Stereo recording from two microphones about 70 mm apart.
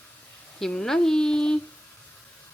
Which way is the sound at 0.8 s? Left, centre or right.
Centre.